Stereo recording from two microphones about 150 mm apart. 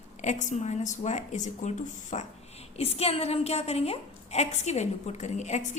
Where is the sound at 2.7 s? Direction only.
40° left (ahead or behind).